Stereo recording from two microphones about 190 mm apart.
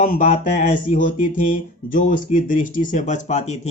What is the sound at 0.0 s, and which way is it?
Speech, 40° left (ahead or behind).